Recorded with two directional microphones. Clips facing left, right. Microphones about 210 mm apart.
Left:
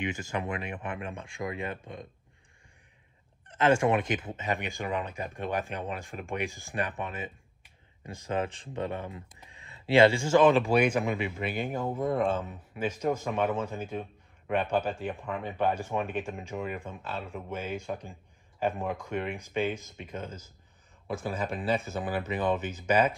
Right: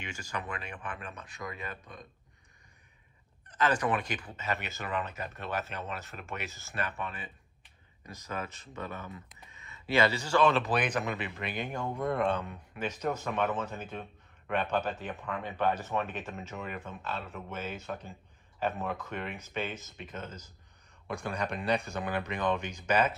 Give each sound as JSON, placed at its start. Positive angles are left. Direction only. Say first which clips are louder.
{"t": 0.0, "sound": "speech", "louder": "left 7 dB", "side_deg": 20}
{"t": 3.4, "sound": "speech", "louder": "left 5 dB", "side_deg": 25}